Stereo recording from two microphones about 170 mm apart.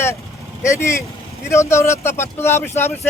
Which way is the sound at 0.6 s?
15° left (ahead or behind).